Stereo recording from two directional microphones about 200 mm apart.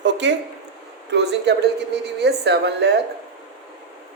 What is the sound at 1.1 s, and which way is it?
A woman's voice, 55° right (ahead or behind).